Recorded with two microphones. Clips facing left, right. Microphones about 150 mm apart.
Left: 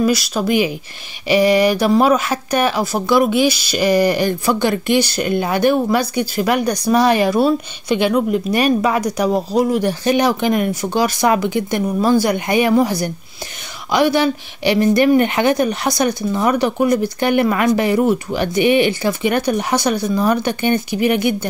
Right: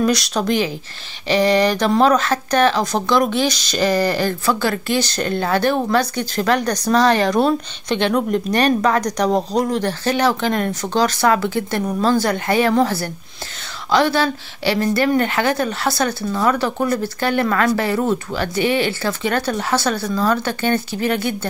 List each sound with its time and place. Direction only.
0.0 s speech: 5° left (ahead or behind)